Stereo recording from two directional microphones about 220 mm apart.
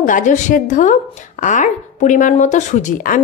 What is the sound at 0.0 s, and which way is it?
Speech, 35° left (ahead or behind).